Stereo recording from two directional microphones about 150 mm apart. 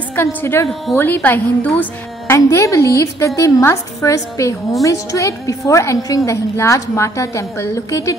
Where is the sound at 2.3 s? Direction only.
20° left (ahead or behind).